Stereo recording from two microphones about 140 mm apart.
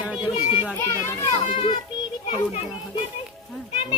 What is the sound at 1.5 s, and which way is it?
Speech, 35° left (ahead or behind).